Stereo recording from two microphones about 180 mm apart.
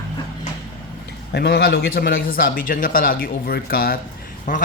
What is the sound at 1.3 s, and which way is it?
A man's voice, 65° left (ahead or behind).